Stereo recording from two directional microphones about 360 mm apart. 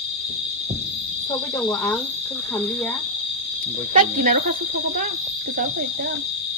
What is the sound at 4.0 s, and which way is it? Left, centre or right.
Speech, right.